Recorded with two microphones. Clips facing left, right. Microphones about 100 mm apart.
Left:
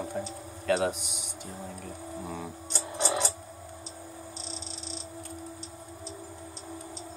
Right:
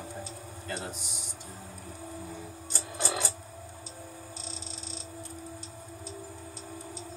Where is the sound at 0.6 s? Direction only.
90° left.